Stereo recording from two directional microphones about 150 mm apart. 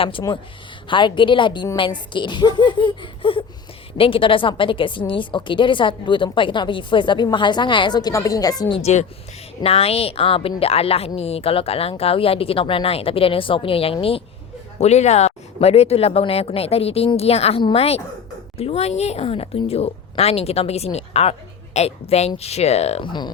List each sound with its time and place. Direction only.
0.0 s a woman's voice: 35° left (ahead or behind)
8.8 s a woman's voice: 50° left (ahead or behind); by 23.3 s 30° left (ahead or behind)